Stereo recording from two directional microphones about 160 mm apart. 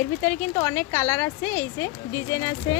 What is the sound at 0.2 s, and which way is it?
Speech, 15° left (ahead or behind).